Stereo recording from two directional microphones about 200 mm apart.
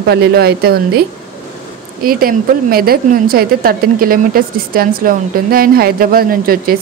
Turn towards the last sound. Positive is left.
turn(degrees=-45)  # may be behind; listen again after turning